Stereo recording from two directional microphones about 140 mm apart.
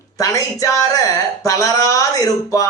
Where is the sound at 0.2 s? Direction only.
25° left (ahead or behind).